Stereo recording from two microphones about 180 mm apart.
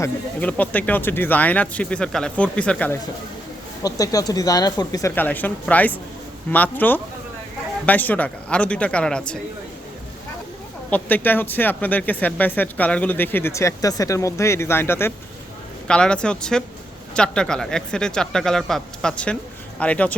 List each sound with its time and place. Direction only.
0.0 s speech: 10° left (ahead or behind)
3.8 s speech: 20° left (ahead or behind)
10.8 s speech: 10° left (ahead or behind)